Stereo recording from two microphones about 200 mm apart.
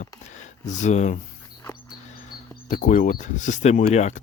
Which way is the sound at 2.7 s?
40° left (ahead or behind).